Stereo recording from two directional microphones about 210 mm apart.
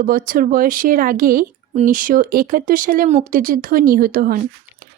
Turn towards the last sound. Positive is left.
turn(degrees=-45)  # may be behind; listen again after turning